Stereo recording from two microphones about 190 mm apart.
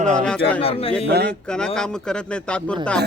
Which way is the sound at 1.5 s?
5° left (ahead or behind).